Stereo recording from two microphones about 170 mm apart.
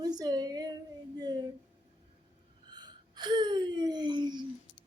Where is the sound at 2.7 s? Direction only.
25° right (ahead or behind).